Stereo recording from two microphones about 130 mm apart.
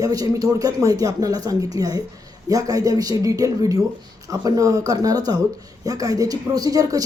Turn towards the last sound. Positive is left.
turn(degrees=-25)  # may be behind; listen again after turning